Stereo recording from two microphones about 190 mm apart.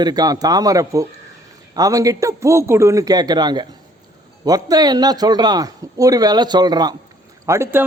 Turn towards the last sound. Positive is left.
turn(degrees=-15)  # may be behind; listen again after turning